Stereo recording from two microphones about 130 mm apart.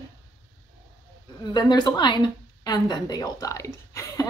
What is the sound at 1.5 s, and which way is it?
A woman's voice, 35° left (ahead or behind).